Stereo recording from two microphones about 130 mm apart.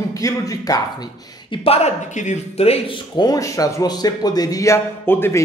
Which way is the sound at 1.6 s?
55° left (ahead or behind).